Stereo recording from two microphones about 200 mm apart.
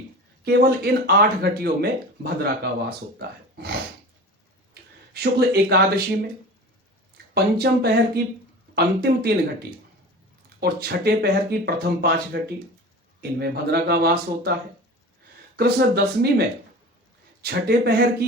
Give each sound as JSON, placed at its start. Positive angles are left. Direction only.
{"t": 0.4, "sound": "speech", "side_deg": -50}
{"t": 7.3, "sound": "speech", "side_deg": -55}
{"t": 15.5, "sound": "speech", "side_deg": -55}